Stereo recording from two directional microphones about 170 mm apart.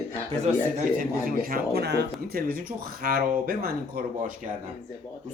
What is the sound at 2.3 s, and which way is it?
Speech, 60° right (ahead or behind).